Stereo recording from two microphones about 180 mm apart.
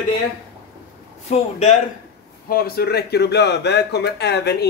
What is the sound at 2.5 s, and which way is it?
A man's voice, 60° left (ahead or behind).